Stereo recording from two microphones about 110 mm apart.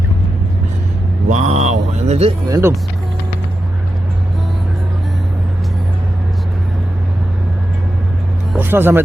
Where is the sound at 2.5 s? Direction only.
25° right (ahead or behind).